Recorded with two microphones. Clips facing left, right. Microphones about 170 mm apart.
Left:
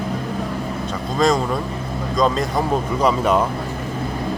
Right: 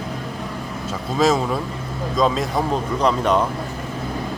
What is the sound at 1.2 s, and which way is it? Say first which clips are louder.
Speech: even; 5° right (ahead or behind).